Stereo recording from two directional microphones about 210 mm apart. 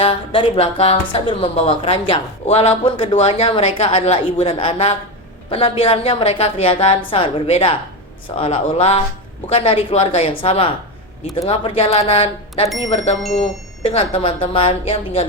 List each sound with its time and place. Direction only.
0.0 s a woman's voice: 25° left (ahead or behind)
13.8 s a woman's voice: 25° left (ahead or behind)